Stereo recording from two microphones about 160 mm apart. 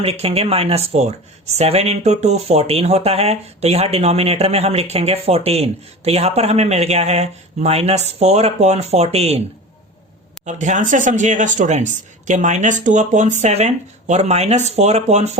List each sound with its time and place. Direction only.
0.0 s speech: 40° right (ahead or behind)
10.4 s speech: 50° right (ahead or behind)